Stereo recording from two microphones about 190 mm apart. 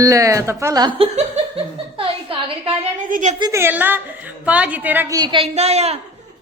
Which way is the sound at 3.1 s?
40° right (ahead or behind).